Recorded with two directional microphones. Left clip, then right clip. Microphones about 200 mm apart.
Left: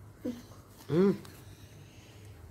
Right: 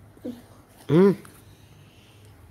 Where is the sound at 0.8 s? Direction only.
45° right (ahead or behind).